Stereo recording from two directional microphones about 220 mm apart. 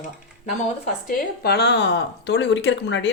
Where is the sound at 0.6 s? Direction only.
35° left (ahead or behind).